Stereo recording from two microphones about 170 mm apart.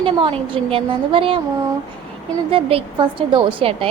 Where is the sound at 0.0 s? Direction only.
30° right (ahead or behind).